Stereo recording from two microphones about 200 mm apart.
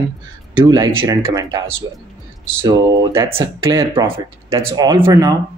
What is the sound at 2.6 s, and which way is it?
Speech, 15° right (ahead or behind).